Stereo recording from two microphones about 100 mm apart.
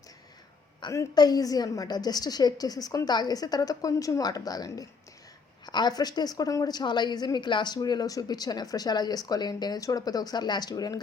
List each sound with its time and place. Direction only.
1.1 s a woman's voice: 45° left (ahead or behind)